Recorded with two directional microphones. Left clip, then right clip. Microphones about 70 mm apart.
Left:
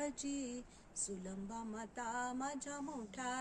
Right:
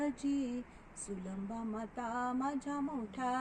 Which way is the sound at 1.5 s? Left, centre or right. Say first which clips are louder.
Right 4 dB; left.